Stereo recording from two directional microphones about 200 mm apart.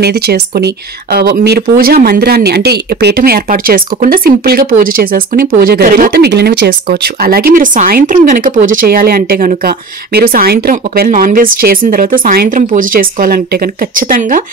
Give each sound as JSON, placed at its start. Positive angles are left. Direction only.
{"t": 0.0, "sound": "speech", "side_deg": -55}